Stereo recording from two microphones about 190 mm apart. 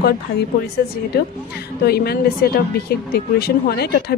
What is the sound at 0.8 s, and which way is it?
Speech, 55° left (ahead or behind).